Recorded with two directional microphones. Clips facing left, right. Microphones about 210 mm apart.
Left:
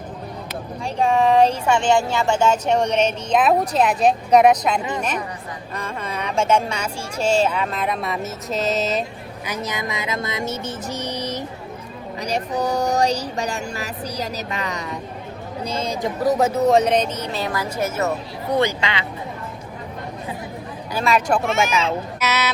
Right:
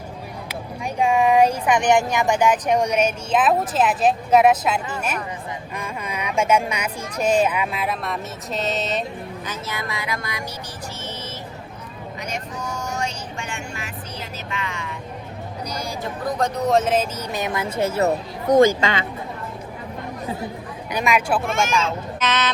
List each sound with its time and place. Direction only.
0.9 s speech: 15° right (ahead or behind)
2.8 s speech: 30° left (ahead or behind)
3.3 s speech: centre (ahead or behind)
9.5 s speech: 15° left (ahead or behind)
12.2 s speech: 35° left (ahead or behind)
15.6 s speech: 25° left (ahead or behind)
16.4 s speech: centre (ahead or behind); by 19.0 s 50° right (ahead or behind)
20.9 s speech: 15° right (ahead or behind)
21.6 s speech: 5° left (ahead or behind)